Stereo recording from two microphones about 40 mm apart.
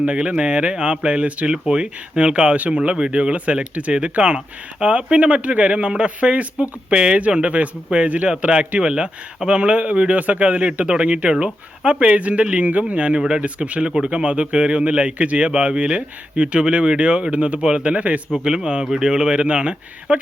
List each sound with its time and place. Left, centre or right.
0.0 s a man's voice: right
8.8 s a man's voice: right
13.1 s speech: right
13.4 s a man's voice: right
18.4 s speech: right